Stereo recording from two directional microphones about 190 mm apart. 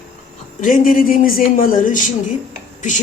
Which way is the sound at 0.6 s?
45° left (ahead or behind).